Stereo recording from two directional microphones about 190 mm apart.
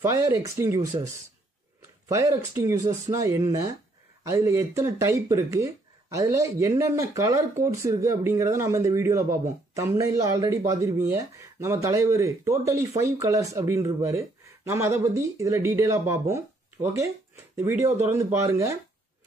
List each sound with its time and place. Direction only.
0.0 s speech: 15° right (ahead or behind)
2.0 s speech: 15° right (ahead or behind)
17.6 s speech: 15° right (ahead or behind)